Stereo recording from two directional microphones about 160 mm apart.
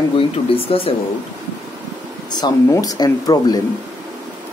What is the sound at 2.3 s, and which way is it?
Speech, 25° left (ahead or behind).